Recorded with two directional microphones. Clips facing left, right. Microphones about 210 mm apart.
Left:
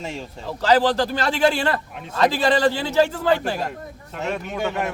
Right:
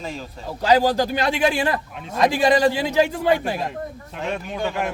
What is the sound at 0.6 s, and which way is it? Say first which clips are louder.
A man's voice: even; 15° right (ahead or behind).